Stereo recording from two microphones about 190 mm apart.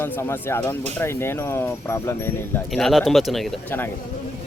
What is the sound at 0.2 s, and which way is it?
Speech, 10° left (ahead or behind).